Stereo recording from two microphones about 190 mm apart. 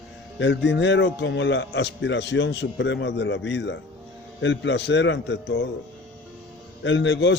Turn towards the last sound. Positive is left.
turn(degrees=65)  # may be behind; listen again after turning